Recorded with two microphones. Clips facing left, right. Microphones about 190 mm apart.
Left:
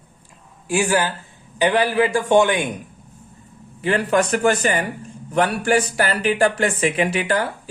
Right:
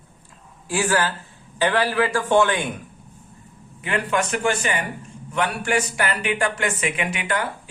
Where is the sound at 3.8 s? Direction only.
35° left (ahead or behind).